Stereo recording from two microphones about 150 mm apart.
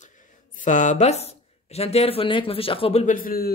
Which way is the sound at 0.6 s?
55° left (ahead or behind).